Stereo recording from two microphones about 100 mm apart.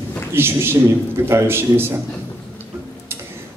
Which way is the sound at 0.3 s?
25° right (ahead or behind).